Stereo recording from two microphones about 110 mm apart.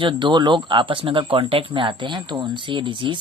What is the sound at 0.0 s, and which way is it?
Speech, 45° right (ahead or behind).